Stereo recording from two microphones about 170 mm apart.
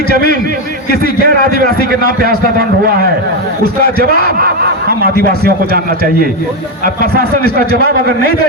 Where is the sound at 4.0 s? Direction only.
65° right (ahead or behind).